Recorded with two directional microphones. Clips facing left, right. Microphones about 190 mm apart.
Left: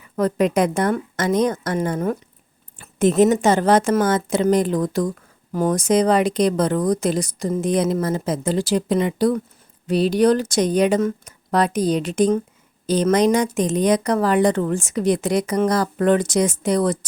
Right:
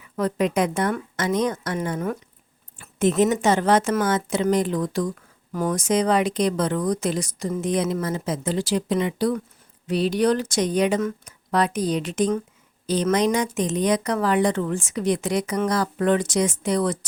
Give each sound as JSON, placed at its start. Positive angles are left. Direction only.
{"t": 0.2, "sound": "a woman's voice", "side_deg": 45}
{"t": 5.5, "sound": "speech", "side_deg": 30}